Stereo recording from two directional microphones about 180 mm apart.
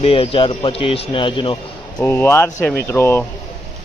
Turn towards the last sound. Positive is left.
turn(degrees=15)  # may be behind; listen again after turning